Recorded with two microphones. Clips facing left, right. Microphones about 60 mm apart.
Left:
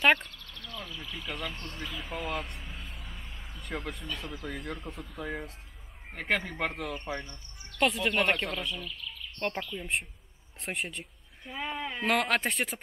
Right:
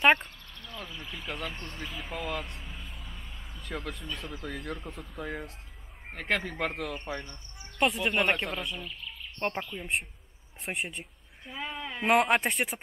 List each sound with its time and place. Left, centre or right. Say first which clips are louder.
0.0 s a sound: right 1 dB; right
1.1 s speech: even; centre
1.9 s a sound: even; centre
4.2 s speech: even; centre
7.8 s speech: even; centre
8.8 s speech: even; right
10.6 s speech: right 1 dB; centre
11.4 s speech: left 2 dB; centre
12.0 s speech: right 4 dB; centre
12.4 s speech: right 1 dB; centre